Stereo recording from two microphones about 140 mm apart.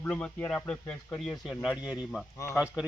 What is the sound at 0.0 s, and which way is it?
Speech, 10° left (ahead or behind).